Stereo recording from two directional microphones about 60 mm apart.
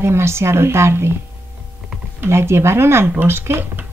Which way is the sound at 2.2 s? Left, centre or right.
Right.